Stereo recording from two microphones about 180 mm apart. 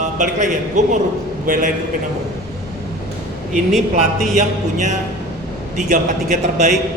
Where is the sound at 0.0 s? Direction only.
45° right (ahead or behind).